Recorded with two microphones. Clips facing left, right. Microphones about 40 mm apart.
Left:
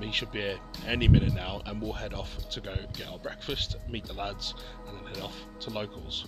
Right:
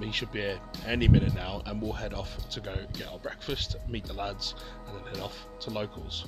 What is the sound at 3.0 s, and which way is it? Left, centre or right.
Speech, centre.